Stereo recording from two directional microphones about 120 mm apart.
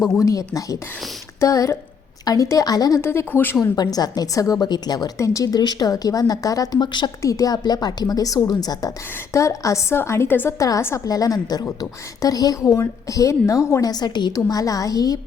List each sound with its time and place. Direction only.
0.2 s a woman's voice: 30° left (ahead or behind)
3.0 s a woman's voice: 20° left (ahead or behind)
3.8 s a woman's voice: 35° left (ahead or behind)